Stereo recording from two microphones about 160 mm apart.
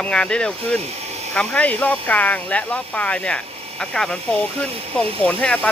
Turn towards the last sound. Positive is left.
turn(degrees=10)  # may be behind; listen again after turning